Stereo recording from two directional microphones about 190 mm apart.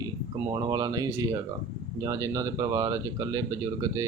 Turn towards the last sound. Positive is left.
turn(degrees=-15)  # may be behind; listen again after turning